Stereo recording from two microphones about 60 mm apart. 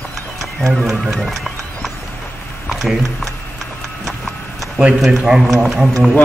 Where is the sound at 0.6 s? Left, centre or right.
Centre.